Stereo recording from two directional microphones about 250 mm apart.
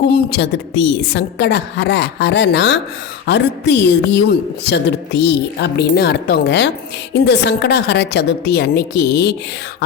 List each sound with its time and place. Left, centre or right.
0.1 s a woman's voice: left